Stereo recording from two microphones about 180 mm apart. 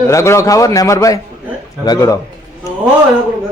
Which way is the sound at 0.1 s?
15° left (ahead or behind).